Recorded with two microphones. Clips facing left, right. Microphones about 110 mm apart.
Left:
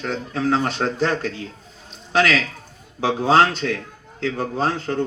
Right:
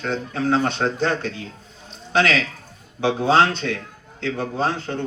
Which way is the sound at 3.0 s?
35° left (ahead or behind).